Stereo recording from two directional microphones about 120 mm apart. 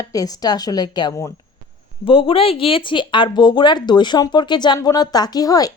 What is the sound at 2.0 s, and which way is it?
A woman's voice, 45° left (ahead or behind).